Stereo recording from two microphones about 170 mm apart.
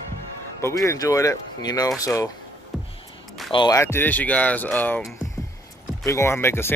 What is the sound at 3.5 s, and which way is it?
Speech, 30° left (ahead or behind).